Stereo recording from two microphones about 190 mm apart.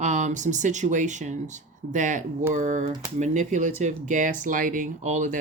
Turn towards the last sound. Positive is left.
turn(degrees=-40)  # may be behind; listen again after turning